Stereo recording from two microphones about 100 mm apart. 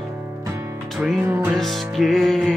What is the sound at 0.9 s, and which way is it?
Music, centre (ahead or behind).